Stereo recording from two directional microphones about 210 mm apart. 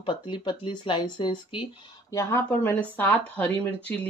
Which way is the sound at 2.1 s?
15° left (ahead or behind).